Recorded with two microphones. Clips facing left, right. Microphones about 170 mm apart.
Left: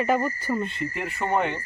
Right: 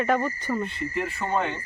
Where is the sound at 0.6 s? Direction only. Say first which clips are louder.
Right 1 dB; 20° left (ahead or behind).